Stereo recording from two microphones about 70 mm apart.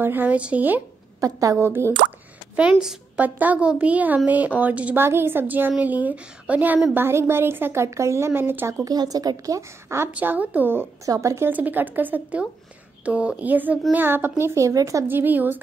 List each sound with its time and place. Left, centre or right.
0.0 s a woman's voice: right
1.2 s speech: right
2.5 s a woman's voice: centre
4.9 s a woman's voice: right
6.9 s a woman's voice: right
8.8 s a woman's voice: right
9.6 s speech: right
10.1 s a woman's voice: right
11.1 s speech: right
11.4 s a woman's voice: right
14.4 s speech: right
15.0 s a woman's voice: right